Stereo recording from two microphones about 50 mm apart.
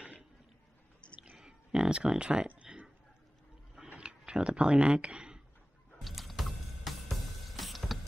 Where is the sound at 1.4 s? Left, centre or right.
Centre.